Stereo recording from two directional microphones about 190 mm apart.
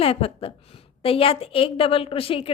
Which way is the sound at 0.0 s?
30° left (ahead or behind).